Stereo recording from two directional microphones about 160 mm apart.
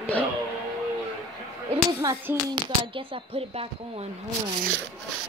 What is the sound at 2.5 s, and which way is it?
Speech, 35° right (ahead or behind).